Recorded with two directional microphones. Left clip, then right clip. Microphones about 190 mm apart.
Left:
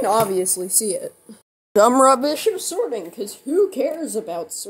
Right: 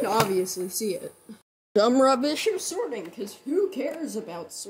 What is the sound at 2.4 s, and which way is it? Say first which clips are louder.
A woman's voice: left 5 dB; 45° right (ahead or behind).